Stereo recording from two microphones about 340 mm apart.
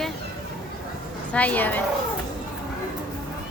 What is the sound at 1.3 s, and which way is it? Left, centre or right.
Speech, centre.